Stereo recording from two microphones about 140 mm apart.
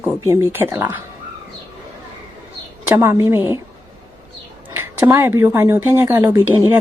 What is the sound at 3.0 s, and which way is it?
Speech, 20° right (ahead or behind).